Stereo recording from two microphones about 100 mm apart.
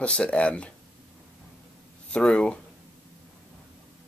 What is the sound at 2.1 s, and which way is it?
Speech, 10° left (ahead or behind).